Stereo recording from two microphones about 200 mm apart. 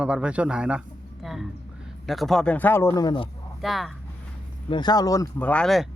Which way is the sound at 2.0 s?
Centre (ahead or behind).